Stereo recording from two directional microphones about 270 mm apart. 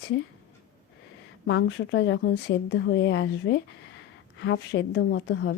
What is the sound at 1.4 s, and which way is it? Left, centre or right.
A woman's voice, left.